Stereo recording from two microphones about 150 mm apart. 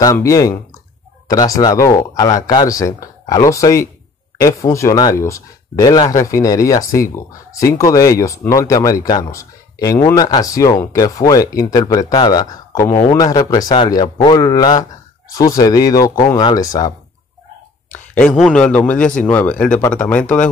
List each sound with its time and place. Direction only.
0.0 s speech: 20° left (ahead or behind)
17.9 s a man's voice: 10° left (ahead or behind)